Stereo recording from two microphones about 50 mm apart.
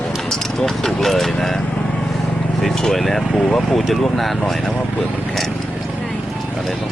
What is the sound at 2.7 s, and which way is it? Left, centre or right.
Vehicle, centre.